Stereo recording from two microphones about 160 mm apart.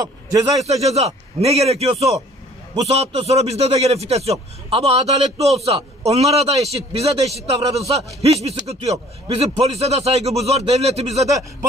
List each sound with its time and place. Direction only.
0.0 s a man's voice: 25° right (ahead or behind)
0.7 s a man's voice: 45° right (ahead or behind)